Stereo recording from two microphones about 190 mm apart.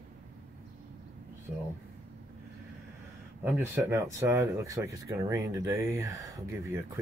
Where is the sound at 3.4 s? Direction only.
10° right (ahead or behind).